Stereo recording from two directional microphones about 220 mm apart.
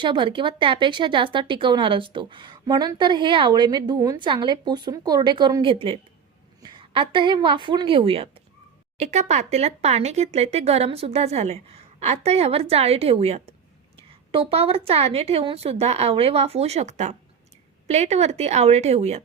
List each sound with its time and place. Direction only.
0.0 s a woman's voice: 20° right (ahead or behind)